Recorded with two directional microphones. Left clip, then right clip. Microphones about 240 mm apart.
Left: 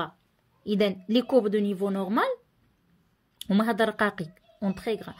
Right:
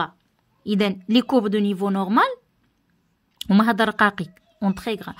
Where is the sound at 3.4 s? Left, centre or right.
Right.